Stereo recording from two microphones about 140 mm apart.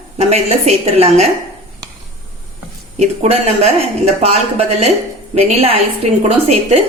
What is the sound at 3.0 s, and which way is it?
A woman's voice, 45° right (ahead or behind).